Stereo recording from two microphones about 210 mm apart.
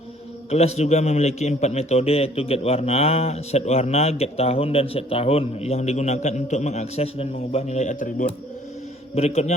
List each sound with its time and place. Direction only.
0.5 s a man's voice: 30° left (ahead or behind)